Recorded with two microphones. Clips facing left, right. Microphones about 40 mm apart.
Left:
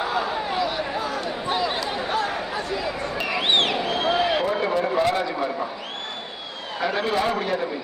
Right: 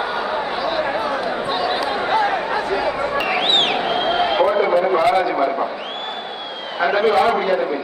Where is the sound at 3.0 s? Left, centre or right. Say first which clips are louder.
Right 6 dB; right.